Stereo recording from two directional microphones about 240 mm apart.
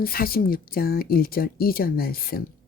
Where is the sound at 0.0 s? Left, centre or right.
Left.